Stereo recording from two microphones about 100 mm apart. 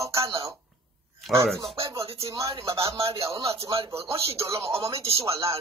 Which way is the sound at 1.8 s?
35° right (ahead or behind).